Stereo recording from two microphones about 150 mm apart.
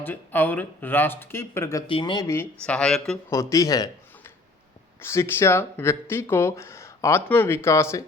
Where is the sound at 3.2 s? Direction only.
20° left (ahead or behind).